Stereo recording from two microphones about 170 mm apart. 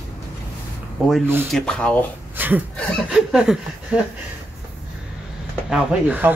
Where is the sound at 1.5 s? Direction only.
5° left (ahead or behind).